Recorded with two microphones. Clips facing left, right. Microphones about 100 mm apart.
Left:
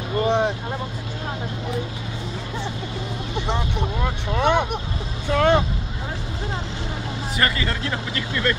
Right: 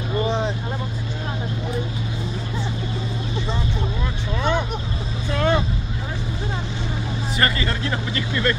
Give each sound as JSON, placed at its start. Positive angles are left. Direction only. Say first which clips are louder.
{"t": 0.2, "sound": "vehicle", "louder": "left 4 dB", "side_deg": 60}
{"t": 3.3, "sound": "vehicle", "louder": "left 3 dB", "side_deg": 60}
{"t": 7.3, "sound": "speech", "louder": "right 1 dB", "side_deg": 0}